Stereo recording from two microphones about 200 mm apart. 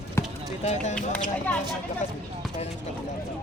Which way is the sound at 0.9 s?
5° left (ahead or behind).